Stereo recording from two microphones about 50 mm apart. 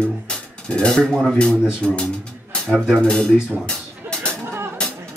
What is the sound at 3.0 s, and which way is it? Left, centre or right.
Speech, centre.